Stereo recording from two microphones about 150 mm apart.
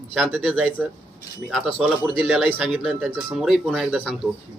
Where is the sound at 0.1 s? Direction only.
5° left (ahead or behind).